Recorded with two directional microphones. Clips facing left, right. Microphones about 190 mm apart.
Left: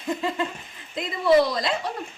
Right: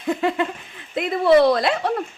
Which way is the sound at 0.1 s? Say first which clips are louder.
Right 5 dB; 65° right (ahead or behind).